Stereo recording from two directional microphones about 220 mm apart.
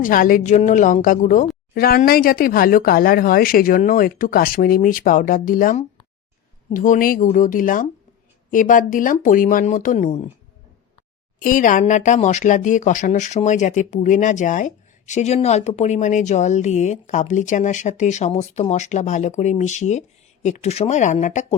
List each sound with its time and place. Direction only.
0.0 s speech: 40° left (ahead or behind)
11.3 s speech: 35° left (ahead or behind)